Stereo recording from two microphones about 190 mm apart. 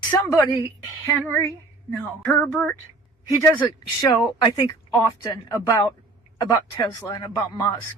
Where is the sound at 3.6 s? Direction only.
20° left (ahead or behind).